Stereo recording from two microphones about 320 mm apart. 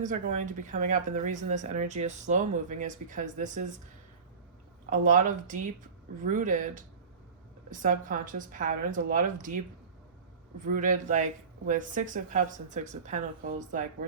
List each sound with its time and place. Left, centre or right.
0.0 s speech: right
4.9 s speech: right